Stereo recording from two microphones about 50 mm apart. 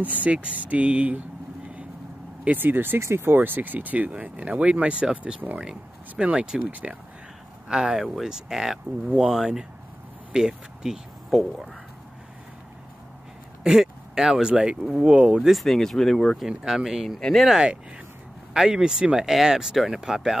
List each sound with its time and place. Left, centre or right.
0.0 s speech: right
2.4 s speech: right
3.0 s speech: right
3.3 s speech: right
4.1 s speech: right
7.6 s speech: centre
13.7 s speech: centre
15.5 s speech: centre
16.4 s speech: centre
17.2 s speech: centre
17.5 s speech: centre